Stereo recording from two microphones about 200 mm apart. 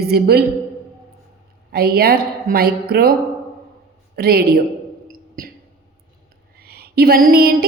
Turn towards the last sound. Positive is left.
turn(degrees=-45)  # may be behind; listen again after turning